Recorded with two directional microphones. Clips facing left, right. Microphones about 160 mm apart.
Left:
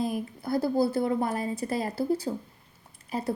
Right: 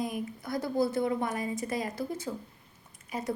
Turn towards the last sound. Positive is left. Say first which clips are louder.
# left 3 dB
turn(degrees=35)  # may be behind; listen again after turning